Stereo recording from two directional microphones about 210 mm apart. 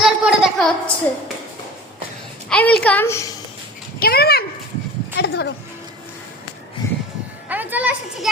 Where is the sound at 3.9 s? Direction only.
45° left (ahead or behind).